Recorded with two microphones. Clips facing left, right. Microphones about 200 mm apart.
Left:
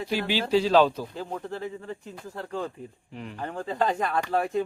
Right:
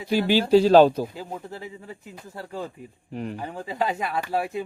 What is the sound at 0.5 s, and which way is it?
Speech, 45° right (ahead or behind).